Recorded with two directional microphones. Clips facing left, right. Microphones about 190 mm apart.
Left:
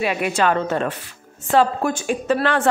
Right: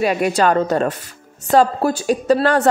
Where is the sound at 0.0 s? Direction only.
40° right (ahead or behind).